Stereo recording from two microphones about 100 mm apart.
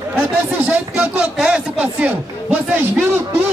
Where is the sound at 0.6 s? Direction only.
15° right (ahead or behind).